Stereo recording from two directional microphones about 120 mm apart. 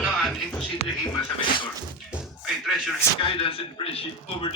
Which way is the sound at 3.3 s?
50° left (ahead or behind).